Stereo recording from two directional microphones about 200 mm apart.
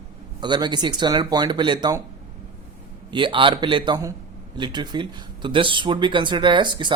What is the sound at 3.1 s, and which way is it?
Speech, 25° right (ahead or behind).